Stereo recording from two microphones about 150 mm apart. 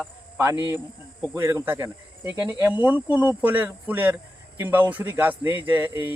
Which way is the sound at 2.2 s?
10° right (ahead or behind).